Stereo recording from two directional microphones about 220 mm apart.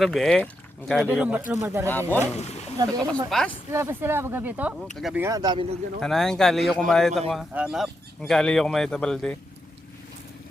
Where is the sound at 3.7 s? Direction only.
10° right (ahead or behind).